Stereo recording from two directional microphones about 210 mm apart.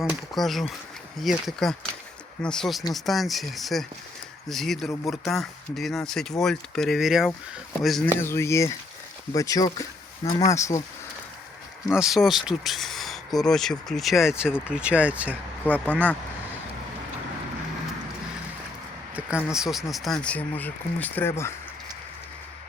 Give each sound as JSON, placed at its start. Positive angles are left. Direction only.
{"t": 0.0, "sound": "speech", "side_deg": 0}
{"t": 8.2, "sound": "speech", "side_deg": 10}
{"t": 11.9, "sound": "speech", "side_deg": 0}
{"t": 15.6, "sound": "speech", "side_deg": 5}
{"t": 19.5, "sound": "speech", "side_deg": 0}